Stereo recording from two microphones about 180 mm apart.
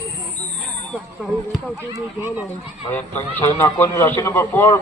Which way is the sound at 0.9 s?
Centre (ahead or behind).